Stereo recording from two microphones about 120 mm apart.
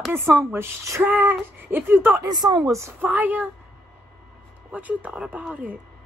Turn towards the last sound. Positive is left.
turn(degrees=-15)  # may be behind; listen again after turning